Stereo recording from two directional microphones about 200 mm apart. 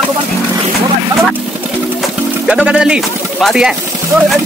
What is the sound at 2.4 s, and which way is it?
Speech, 5° right (ahead or behind).